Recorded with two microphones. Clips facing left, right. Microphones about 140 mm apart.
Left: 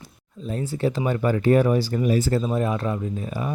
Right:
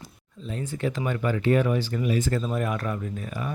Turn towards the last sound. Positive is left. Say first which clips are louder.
# left 4 dB
turn(degrees=30)  # may be behind; listen again after turning